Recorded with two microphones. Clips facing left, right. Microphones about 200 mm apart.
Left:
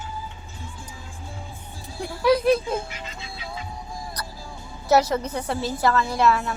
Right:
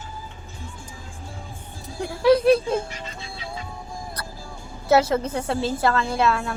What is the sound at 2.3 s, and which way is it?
Speech, 30° right (ahead or behind).